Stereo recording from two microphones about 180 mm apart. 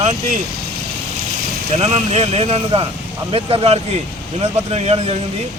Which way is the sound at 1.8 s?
35° right (ahead or behind).